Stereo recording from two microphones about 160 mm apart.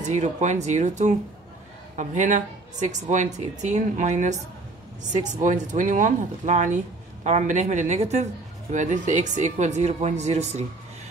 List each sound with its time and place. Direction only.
0.0 s speech: 50° right (ahead or behind)
5.4 s speech: 50° right (ahead or behind)